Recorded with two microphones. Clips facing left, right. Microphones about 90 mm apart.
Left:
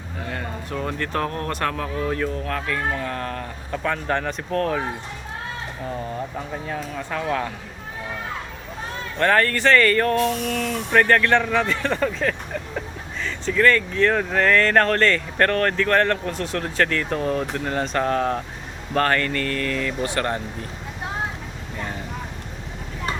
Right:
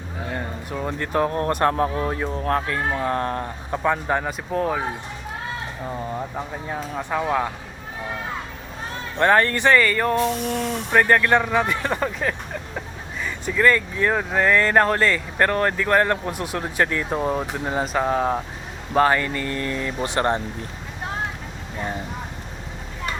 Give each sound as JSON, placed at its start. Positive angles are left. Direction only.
{"t": 0.3, "sound": "speech", "side_deg": -15}
{"t": 1.6, "sound": "speech", "side_deg": -30}
{"t": 3.8, "sound": "speech", "side_deg": -15}
{"t": 7.1, "sound": "speech", "side_deg": -15}
{"t": 9.1, "sound": "speech", "side_deg": -20}
{"t": 9.8, "sound": "speech", "side_deg": -5}
{"t": 10.9, "sound": "speech", "side_deg": -15}